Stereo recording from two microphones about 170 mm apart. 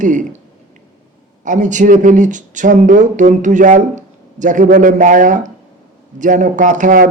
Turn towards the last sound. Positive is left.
turn(degrees=-50)  # may be behind; listen again after turning